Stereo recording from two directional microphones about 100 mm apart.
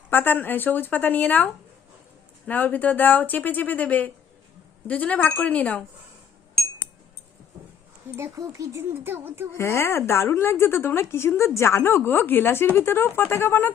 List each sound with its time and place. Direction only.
0.1 s speech: 20° left (ahead or behind)
2.5 s speech: 15° left (ahead or behind)
8.1 s speech: 30° right (ahead or behind)
9.6 s a woman's voice: 25° left (ahead or behind)